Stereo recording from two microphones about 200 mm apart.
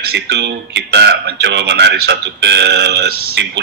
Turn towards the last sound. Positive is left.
turn(degrees=-55)  # may be behind; listen again after turning